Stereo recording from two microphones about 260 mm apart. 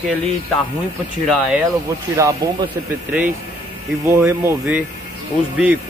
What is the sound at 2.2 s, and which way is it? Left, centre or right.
Speech, centre.